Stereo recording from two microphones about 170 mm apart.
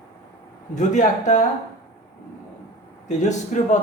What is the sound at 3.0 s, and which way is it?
Speech, 45° left (ahead or behind).